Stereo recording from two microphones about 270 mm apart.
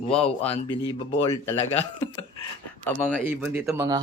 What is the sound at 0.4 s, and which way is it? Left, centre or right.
Speech, centre.